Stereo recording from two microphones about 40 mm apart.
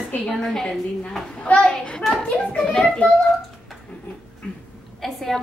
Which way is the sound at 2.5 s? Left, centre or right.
Left.